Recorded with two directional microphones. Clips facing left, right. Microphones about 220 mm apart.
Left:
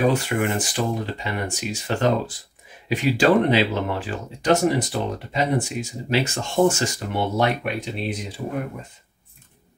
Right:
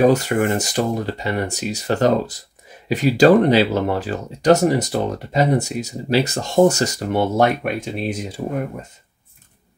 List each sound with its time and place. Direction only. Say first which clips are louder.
0.0 s speech: right 5 dB; 40° right (ahead or behind)